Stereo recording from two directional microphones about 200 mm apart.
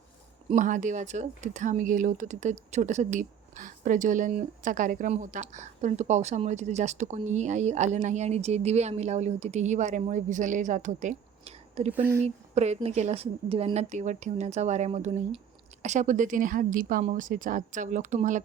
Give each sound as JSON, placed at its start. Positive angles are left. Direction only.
{"t": 0.5, "sound": "speech", "side_deg": -40}